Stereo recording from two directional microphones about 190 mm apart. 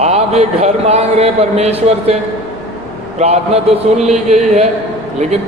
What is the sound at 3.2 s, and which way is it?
A man's voice, 35° right (ahead or behind).